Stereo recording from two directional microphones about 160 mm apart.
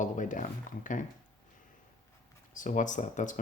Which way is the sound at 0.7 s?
55° left (ahead or behind).